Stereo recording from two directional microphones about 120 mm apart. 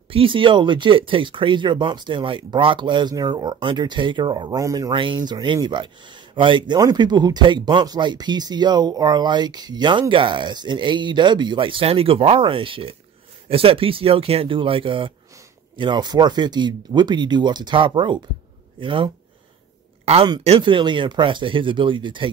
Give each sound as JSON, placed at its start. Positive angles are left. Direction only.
{"t": 0.1, "sound": "speech", "side_deg": -45}
{"t": 4.6, "sound": "speech", "side_deg": -30}
{"t": 4.9, "sound": "speech", "side_deg": -45}
{"t": 20.4, "sound": "speech", "side_deg": -45}